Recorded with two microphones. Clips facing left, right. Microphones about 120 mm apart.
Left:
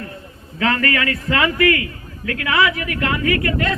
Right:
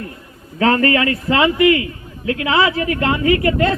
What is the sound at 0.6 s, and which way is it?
A man's voice, 30° right (ahead or behind).